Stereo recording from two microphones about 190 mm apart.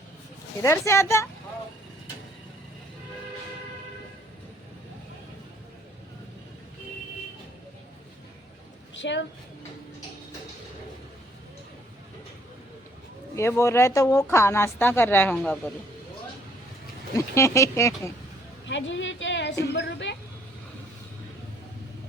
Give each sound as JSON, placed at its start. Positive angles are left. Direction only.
{"t": 0.6, "sound": "speech", "side_deg": 15}
{"t": 9.0, "sound": "a woman's voice", "side_deg": 70}
{"t": 13.3, "sound": "speech", "side_deg": 15}
{"t": 17.2, "sound": "speech", "side_deg": 15}
{"t": 18.7, "sound": "a woman's voice", "side_deg": 75}